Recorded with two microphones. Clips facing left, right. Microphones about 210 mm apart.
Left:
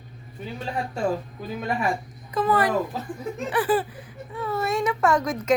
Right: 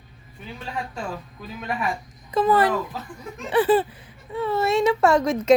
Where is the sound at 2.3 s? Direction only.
25° right (ahead or behind).